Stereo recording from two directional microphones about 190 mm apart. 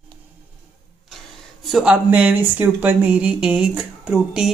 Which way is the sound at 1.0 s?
Centre (ahead or behind).